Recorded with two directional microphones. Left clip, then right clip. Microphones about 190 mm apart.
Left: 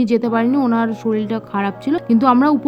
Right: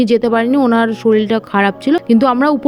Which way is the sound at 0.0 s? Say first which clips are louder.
Right 4 dB; 25° right (ahead or behind).